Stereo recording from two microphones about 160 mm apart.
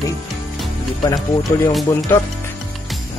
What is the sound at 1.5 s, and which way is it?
Speech, 15° left (ahead or behind).